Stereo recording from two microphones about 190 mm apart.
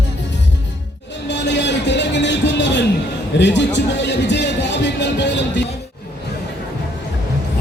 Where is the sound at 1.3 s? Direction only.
65° left (ahead or behind).